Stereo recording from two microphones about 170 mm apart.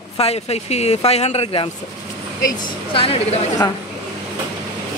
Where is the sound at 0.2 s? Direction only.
35° left (ahead or behind).